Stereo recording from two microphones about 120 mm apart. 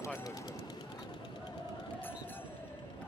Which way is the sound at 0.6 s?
35° left (ahead or behind).